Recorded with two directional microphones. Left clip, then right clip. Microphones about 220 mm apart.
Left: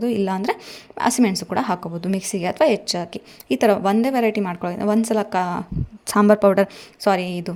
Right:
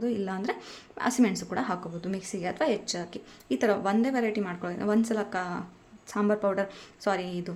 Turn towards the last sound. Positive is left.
turn(degrees=35)  # may be behind; listen again after turning